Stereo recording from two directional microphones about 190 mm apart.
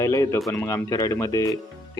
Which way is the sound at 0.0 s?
15° left (ahead or behind).